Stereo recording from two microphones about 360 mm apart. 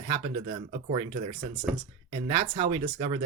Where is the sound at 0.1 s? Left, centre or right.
Centre.